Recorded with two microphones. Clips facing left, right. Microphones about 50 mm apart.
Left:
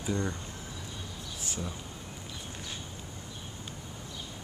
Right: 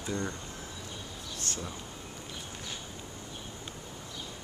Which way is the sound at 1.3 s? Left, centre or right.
Centre.